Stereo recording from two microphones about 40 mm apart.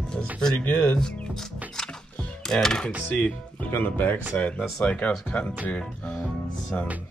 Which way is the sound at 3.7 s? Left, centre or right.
Left.